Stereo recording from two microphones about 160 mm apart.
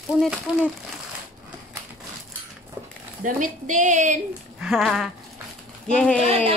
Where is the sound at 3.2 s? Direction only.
55° right (ahead or behind).